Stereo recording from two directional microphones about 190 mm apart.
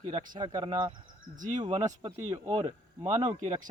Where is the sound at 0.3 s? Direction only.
25° right (ahead or behind).